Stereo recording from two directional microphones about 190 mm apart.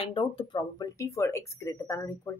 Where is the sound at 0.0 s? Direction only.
30° left (ahead or behind).